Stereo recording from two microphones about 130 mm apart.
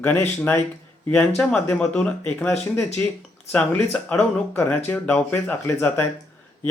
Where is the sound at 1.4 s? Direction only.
5° left (ahead or behind).